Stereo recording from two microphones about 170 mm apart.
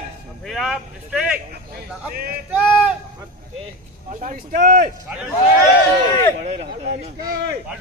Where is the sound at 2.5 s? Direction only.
10° right (ahead or behind).